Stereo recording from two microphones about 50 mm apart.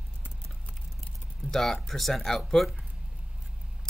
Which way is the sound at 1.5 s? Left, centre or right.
Centre.